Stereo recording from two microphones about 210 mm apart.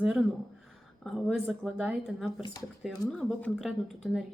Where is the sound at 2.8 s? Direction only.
Centre (ahead or behind).